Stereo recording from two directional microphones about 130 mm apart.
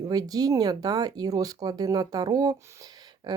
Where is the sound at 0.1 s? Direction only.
30° right (ahead or behind).